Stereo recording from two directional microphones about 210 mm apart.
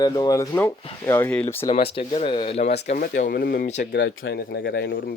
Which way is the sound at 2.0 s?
25° left (ahead or behind).